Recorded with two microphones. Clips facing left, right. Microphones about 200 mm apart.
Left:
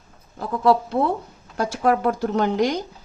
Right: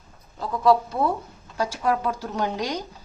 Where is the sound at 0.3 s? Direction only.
55° left (ahead or behind).